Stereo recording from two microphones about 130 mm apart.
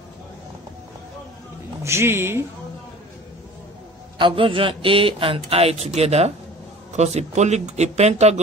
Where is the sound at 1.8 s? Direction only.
20° right (ahead or behind).